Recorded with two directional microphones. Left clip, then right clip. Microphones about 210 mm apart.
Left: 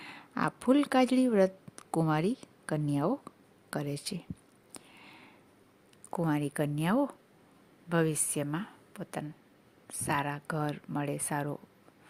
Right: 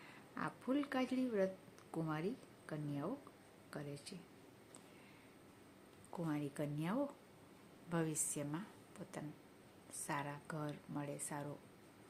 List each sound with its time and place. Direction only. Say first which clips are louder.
0.0 s speech: left 13 dB; 50° left (ahead or behind)
6.1 s a woman's voice: left 12 dB; 50° left (ahead or behind)